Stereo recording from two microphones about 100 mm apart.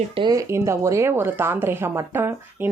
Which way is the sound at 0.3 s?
30° right (ahead or behind).